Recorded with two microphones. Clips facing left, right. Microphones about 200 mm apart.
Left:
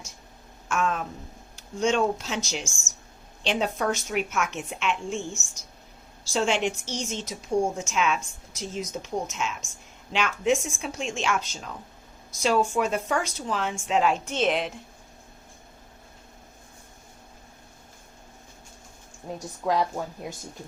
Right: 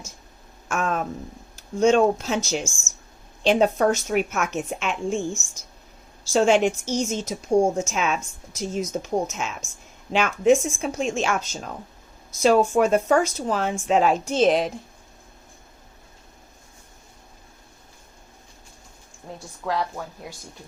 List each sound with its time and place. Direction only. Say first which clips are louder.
0.7 s a sound: right 2 dB; 45° right (ahead or behind)
1.8 s a woman's voice: right 6 dB; 45° right (ahead or behind)
19.6 s a woman's voice: left 2 dB; 15° left (ahead or behind)